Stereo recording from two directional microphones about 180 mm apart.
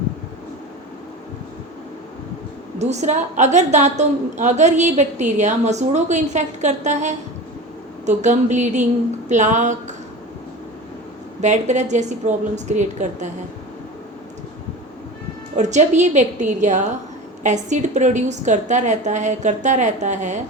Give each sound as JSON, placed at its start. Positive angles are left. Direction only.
{"t": 2.7, "sound": "a woman's voice", "side_deg": -40}
{"t": 11.3, "sound": "a woman's voice", "side_deg": -40}
{"t": 15.5, "sound": "a woman's voice", "side_deg": -40}